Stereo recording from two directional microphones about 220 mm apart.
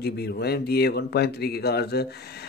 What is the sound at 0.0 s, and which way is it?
A man's voice, 45° left (ahead or behind).